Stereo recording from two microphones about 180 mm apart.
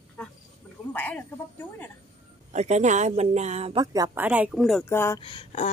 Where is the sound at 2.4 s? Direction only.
40° right (ahead or behind).